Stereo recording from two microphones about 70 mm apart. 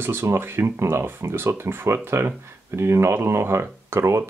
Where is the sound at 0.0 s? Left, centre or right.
Right.